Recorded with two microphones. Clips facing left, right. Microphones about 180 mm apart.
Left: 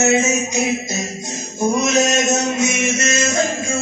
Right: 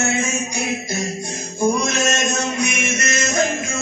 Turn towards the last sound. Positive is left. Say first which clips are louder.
# left 1 dB
turn(degrees=25)  # may be behind; listen again after turning